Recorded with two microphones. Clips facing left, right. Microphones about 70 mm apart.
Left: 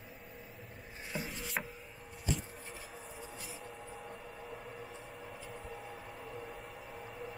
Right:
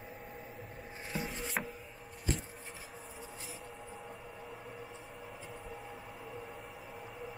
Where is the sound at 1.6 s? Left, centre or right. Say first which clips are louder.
Right 1 dB; centre.